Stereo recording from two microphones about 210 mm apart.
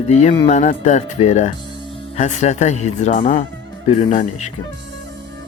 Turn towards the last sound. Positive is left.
turn(degrees=30)  # may be behind; listen again after turning